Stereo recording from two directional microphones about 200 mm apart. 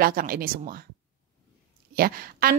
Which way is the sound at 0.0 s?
45° right (ahead or behind).